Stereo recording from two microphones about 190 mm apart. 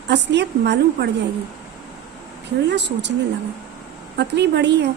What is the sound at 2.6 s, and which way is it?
Speech, 65° right (ahead or behind).